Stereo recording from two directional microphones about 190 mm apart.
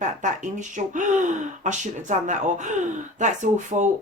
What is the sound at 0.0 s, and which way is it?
Speech, 40° right (ahead or behind).